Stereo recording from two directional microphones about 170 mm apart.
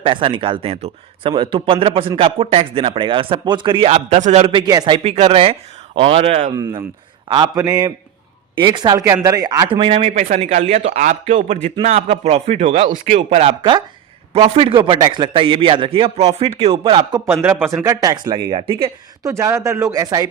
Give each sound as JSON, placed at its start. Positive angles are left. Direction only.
{"t": 0.0, "sound": "a man's voice", "side_deg": -30}
{"t": 5.0, "sound": "a man's voice", "side_deg": -35}
{"t": 9.8, "sound": "a man's voice", "side_deg": -35}
{"t": 19.2, "sound": "speech", "side_deg": -15}